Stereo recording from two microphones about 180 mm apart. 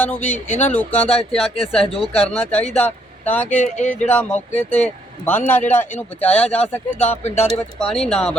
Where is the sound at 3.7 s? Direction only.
40° left (ahead or behind).